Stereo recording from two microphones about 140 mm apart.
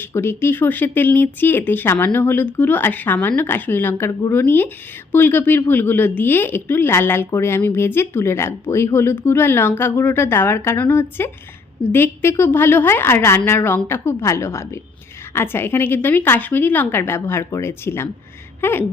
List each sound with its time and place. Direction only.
0.1 s speech: 20° left (ahead or behind)